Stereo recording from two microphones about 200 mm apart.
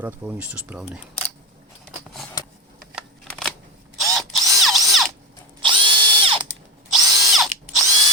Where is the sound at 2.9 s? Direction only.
Centre (ahead or behind).